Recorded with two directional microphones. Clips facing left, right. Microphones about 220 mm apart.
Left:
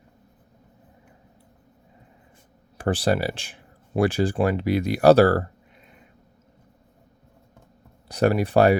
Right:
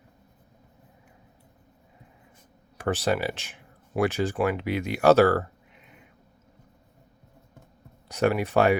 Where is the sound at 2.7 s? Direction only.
30° left (ahead or behind).